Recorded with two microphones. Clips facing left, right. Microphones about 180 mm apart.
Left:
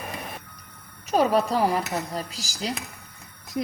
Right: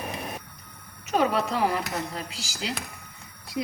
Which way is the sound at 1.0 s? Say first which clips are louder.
Left 3 dB; 35° left (ahead or behind).